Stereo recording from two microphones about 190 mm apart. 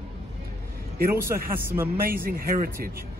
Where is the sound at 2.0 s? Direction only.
50° right (ahead or behind).